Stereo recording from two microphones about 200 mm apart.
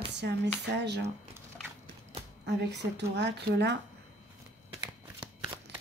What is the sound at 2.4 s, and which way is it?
Speech, 60° right (ahead or behind).